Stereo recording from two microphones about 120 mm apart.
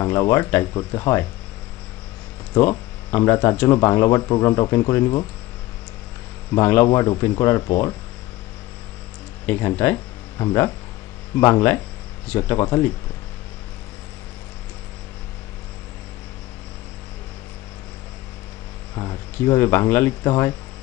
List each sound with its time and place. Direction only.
0.0 s speech: 25° left (ahead or behind)
2.7 s speech: 25° left (ahead or behind)
6.5 s speech: 20° left (ahead or behind)
9.5 s speech: 25° left (ahead or behind)
18.9 s speech: 30° left (ahead or behind)